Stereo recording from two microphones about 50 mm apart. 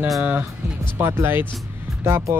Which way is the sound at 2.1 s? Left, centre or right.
Right.